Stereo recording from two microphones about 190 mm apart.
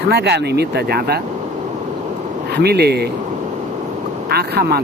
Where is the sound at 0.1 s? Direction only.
60° right (ahead or behind).